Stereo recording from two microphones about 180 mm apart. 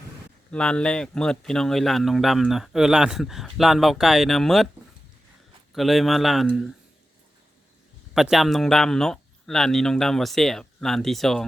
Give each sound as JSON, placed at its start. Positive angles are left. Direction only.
{"t": 0.5, "sound": "speech", "side_deg": 5}
{"t": 5.7, "sound": "speech", "side_deg": 0}
{"t": 8.1, "sound": "speech", "side_deg": 0}